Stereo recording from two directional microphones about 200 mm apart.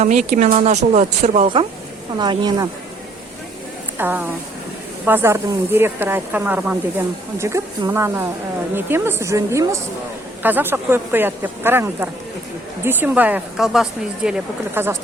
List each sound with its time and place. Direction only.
0.0 s a woman's voice: 35° right (ahead or behind); by 2.6 s 20° right (ahead or behind)
3.9 s speech: 10° right (ahead or behind)